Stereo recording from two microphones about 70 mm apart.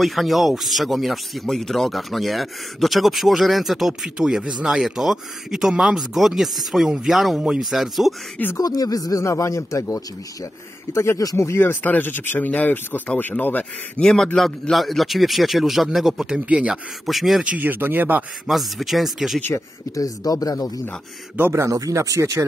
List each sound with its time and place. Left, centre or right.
0.0 s speech: centre
8.5 s speech: left
11.6 s speech: left
14.0 s speech: centre
17.0 s speech: centre
17.5 s speech: right
18.5 s speech: centre
20.0 s speech: left
21.4 s a man's voice: right